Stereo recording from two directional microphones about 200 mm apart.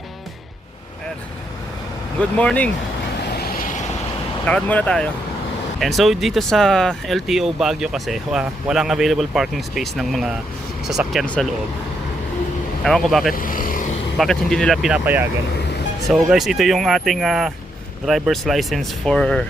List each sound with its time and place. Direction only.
2.4 s speech: 5° left (ahead or behind)
3.3 s vehicle: 50° left (ahead or behind)
4.4 s speech: 5° left (ahead or behind)
12.8 s speech: centre (ahead or behind)
13.3 s vehicle: 45° left (ahead or behind)
14.2 s speech: centre (ahead or behind)